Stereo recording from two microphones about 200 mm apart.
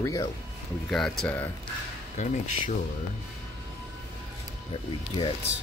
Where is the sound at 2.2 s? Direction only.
35° left (ahead or behind).